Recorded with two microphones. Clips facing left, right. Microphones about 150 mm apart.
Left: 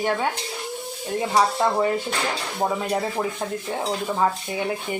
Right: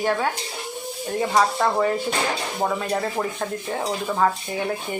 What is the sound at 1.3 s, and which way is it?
Speech, 15° left (ahead or behind).